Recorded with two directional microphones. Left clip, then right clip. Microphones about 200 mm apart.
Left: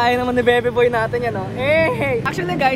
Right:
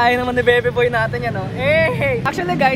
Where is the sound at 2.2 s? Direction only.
10° left (ahead or behind).